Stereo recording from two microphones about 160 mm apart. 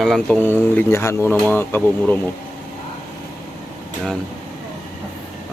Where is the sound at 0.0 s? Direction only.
5° left (ahead or behind).